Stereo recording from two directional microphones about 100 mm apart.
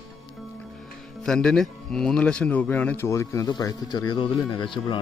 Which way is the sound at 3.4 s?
45° left (ahead or behind).